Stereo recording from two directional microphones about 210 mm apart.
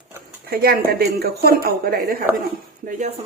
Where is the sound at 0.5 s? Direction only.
45° right (ahead or behind).